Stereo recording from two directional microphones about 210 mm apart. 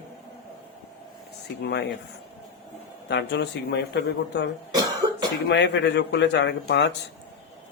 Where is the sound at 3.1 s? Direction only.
55° left (ahead or behind).